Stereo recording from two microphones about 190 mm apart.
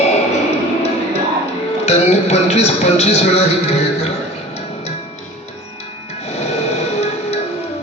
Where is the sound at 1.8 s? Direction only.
35° left (ahead or behind).